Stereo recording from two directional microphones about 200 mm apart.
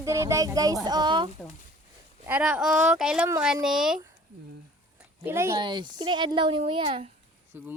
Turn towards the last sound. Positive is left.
turn(degrees=-10)  # may be behind; listen again after turning